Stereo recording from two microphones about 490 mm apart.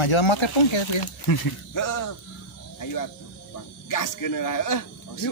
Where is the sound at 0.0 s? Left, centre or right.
Left.